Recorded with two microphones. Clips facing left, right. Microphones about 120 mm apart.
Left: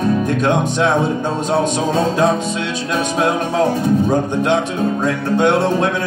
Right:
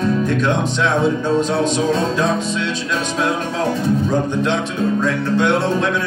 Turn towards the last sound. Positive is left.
turn(degrees=50)  # may be behind; listen again after turning